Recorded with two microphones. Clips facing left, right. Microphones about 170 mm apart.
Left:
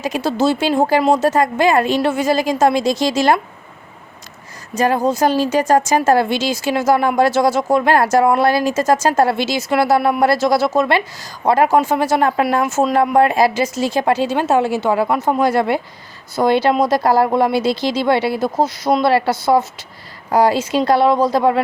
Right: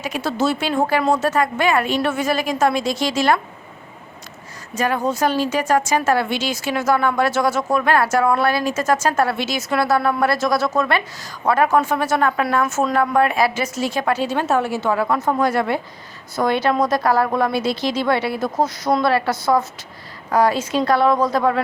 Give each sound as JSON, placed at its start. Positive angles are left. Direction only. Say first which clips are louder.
{"t": 0.0, "sound": "speech", "louder": "left 4 dB", "side_deg": 40}
{"t": 4.7, "sound": "speech", "louder": "left 4 dB", "side_deg": 40}
{"t": 15.0, "sound": "speech", "louder": "left 2 dB", "side_deg": 20}
{"t": 15.4, "sound": "speech", "louder": "left 3 dB", "side_deg": 35}